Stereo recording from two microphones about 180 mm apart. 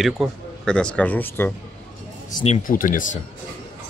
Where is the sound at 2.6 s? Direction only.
50° left (ahead or behind).